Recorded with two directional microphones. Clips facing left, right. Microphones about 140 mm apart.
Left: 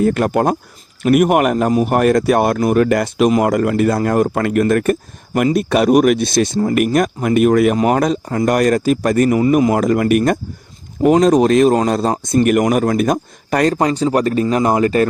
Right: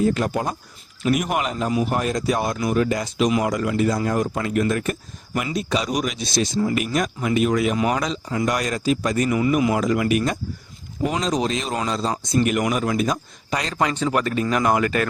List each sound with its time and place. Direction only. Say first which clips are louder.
0.0 s a man's voice: left 7 dB; 60° left (ahead or behind)
9.4 s speech: left 6 dB; 40° left (ahead or behind)
13.7 s speech: left 6 dB; 35° left (ahead or behind)